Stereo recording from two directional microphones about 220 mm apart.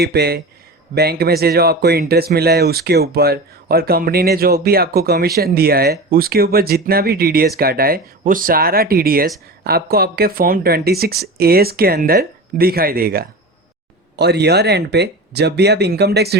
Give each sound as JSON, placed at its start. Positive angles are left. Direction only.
{"t": 0.0, "sound": "speech", "side_deg": -45}